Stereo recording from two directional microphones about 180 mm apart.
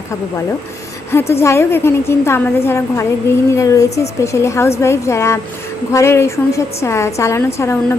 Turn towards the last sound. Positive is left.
turn(degrees=15)  # may be behind; listen again after turning